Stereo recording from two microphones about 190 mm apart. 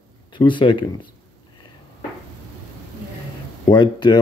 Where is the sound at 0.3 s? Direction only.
25° left (ahead or behind).